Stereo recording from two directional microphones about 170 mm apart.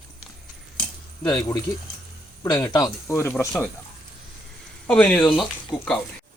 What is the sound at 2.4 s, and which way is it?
Speech, 15° left (ahead or behind).